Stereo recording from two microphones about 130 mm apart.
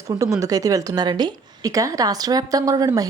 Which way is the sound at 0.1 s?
25° right (ahead or behind).